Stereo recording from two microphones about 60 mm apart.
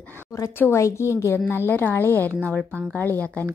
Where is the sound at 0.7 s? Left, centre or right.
Left.